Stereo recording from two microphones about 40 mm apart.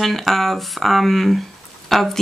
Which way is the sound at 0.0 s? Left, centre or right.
Centre.